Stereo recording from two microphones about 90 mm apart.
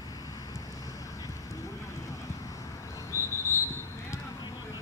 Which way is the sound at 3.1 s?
35° left (ahead or behind).